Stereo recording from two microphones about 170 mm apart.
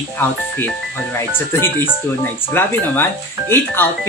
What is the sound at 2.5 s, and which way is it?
Speech, 10° left (ahead or behind).